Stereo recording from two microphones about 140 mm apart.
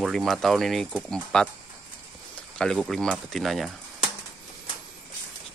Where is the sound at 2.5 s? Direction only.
Centre (ahead or behind).